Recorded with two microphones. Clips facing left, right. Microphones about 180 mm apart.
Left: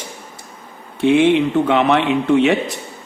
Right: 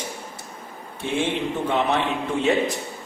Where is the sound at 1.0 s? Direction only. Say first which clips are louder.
Left 12 dB; 70° left (ahead or behind).